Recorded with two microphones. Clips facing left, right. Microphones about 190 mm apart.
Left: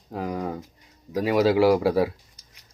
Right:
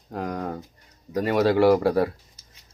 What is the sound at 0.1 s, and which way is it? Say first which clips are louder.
Speech: left 1 dB; 5° left (ahead or behind).